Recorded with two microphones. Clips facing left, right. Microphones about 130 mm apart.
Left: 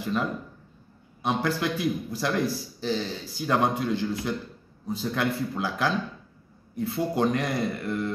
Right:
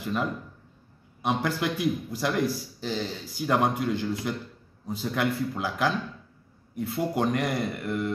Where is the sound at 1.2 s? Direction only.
15° right (ahead or behind).